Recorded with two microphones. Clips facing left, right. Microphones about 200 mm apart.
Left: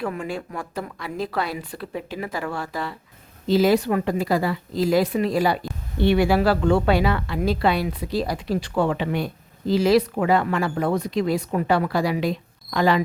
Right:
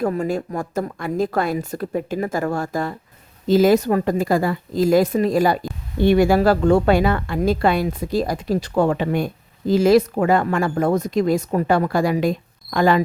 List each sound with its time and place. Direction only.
0.0 s a woman's voice: 40° right (ahead or behind)